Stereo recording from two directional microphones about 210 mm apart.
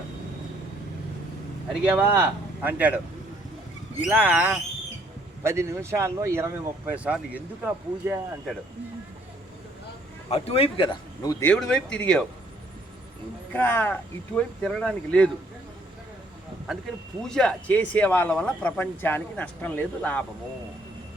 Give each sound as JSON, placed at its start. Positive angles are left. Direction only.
{"t": 1.7, "sound": "speech", "side_deg": -5}
{"t": 4.0, "sound": "speech", "side_deg": -5}
{"t": 10.2, "sound": "speech", "side_deg": 30}
{"t": 11.5, "sound": "speech", "side_deg": 0}
{"t": 13.5, "sound": "speech", "side_deg": 10}
{"t": 17.2, "sound": "speech", "side_deg": 5}